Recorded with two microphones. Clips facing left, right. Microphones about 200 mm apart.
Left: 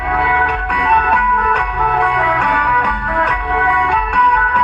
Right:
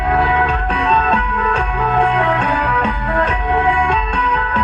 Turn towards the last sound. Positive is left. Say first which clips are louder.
# left 2 dB
turn(degrees=-25)  # may be behind; listen again after turning